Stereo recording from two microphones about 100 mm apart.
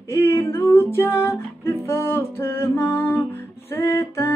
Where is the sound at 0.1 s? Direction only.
25° left (ahead or behind).